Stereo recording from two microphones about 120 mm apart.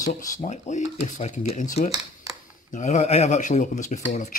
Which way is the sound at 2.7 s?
80° left.